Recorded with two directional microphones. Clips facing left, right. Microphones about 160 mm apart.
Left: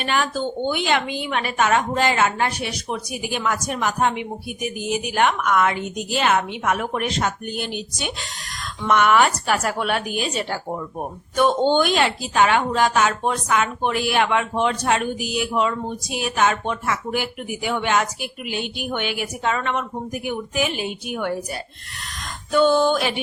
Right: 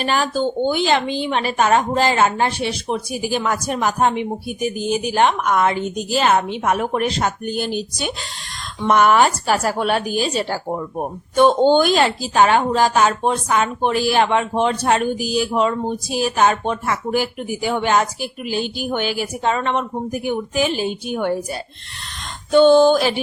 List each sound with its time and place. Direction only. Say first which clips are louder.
0.0 s speech: right 4 dB; 35° right (ahead or behind)